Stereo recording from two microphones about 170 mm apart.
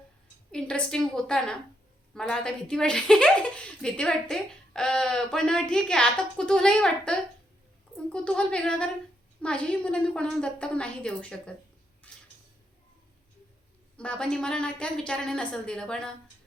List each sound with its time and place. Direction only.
0.5 s a woman's voice: 5° left (ahead or behind)
12.0 s a sound: 10° left (ahead or behind)
13.9 s speech: 5° left (ahead or behind)